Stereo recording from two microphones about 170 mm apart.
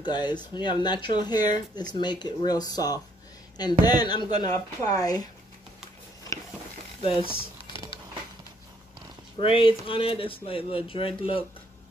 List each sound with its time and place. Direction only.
0.0 s speech: 25° left (ahead or behind)
7.0 s speech: 30° left (ahead or behind)
9.4 s speech: 30° left (ahead or behind)